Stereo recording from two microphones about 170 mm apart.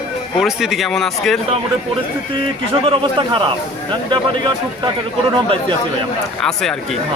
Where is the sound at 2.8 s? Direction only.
30° right (ahead or behind).